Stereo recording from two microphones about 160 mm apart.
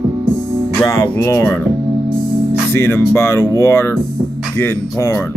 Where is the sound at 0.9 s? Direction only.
15° left (ahead or behind).